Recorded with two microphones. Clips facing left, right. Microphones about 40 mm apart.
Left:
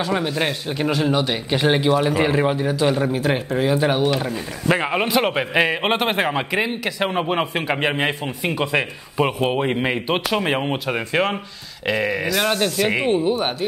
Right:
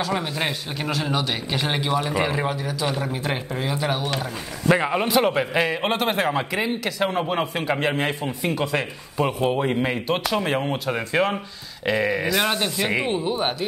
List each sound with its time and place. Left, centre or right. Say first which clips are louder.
0.0 s a man's voice: left 3 dB; centre; by 4.1 s left
4.6 s a man's voice: even; centre
11.8 s speech: left 1 dB; centre
12.8 s a man's voice: left 2 dB; centre